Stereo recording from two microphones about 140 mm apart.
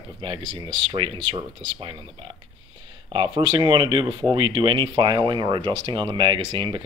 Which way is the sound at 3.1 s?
40° right (ahead or behind).